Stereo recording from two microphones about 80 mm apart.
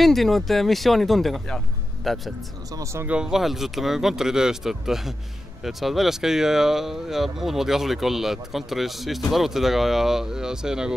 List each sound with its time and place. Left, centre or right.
0.0 s speech: centre
2.7 s speech: right
3.1 s speech: centre